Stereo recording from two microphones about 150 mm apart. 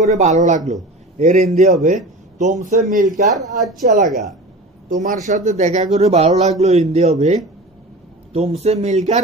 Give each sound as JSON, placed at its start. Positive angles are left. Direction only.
{"t": 0.0, "sound": "a man's voice", "side_deg": -50}
{"t": 2.8, "sound": "speech", "side_deg": -65}
{"t": 3.3, "sound": "speech", "side_deg": 0}
{"t": 4.8, "sound": "speech", "side_deg": -55}